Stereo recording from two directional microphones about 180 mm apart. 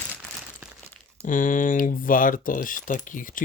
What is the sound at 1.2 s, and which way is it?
Speech, 45° left (ahead or behind).